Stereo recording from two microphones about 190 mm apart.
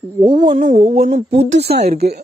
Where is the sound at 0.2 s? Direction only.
25° right (ahead or behind).